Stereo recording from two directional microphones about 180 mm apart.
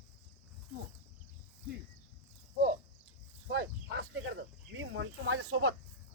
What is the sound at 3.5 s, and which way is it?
Snake, 80° right.